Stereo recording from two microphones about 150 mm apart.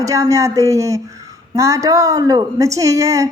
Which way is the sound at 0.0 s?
20° right (ahead or behind).